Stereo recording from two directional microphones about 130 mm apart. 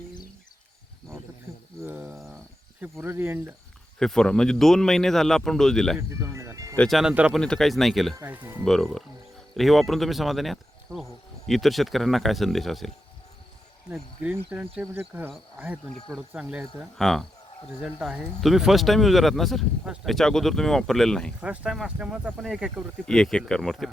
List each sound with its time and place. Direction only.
2.0 s a sound: centre (ahead or behind)
2.8 s speech: 15° right (ahead or behind)
4.0 s speech: 5° left (ahead or behind)
6.0 s music: 20° right (ahead or behind)
6.7 s speech: centre (ahead or behind)
7.3 s speech: 5° left (ahead or behind)
8.1 s speech: 15° right (ahead or behind)
8.6 s speech: centre (ahead or behind)
13.9 s speech: 10° right (ahead or behind)
15.9 s speech: 5° left (ahead or behind)
16.3 s speech: 10° right (ahead or behind)
17.0 s speech: centre (ahead or behind)
21.4 s speech: 10° right (ahead or behind)